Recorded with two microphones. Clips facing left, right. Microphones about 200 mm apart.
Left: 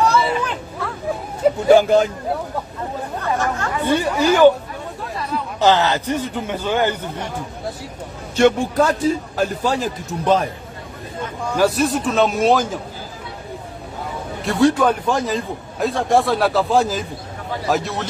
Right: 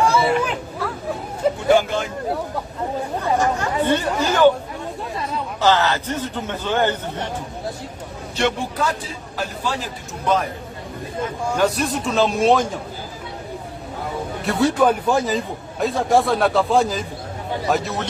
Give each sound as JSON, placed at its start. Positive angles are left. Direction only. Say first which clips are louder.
{"t": 0.0, "sound": "hubbub", "louder": "even", "side_deg": -10}
{"t": 1.7, "sound": "a man's voice", "louder": "left 6 dB", "side_deg": 35}
{"t": 3.2, "sound": "speech", "louder": "right 2 dB", "side_deg": -15}
{"t": 4.2, "sound": "a man's voice", "louder": "left 5 dB", "side_deg": 10}
{"t": 5.6, "sound": "a man's voice", "louder": "left 2 dB", "side_deg": 15}
{"t": 8.4, "sound": "a man's voice", "louder": "left 7 dB", "side_deg": 45}
{"t": 11.5, "sound": "a man's voice", "louder": "left 4 dB", "side_deg": 5}
{"t": 14.4, "sound": "a man's voice", "louder": "left 2 dB", "side_deg": -5}